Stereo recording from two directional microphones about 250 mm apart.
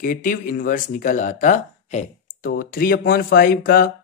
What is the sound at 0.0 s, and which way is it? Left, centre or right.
Speech, left.